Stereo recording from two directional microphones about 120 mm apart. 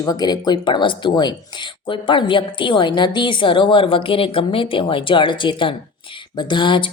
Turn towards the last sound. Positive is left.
turn(degrees=45)  # may be behind; listen again after turning